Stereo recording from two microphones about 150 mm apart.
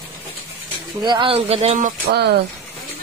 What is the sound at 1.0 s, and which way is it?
Speech, 30° right (ahead or behind).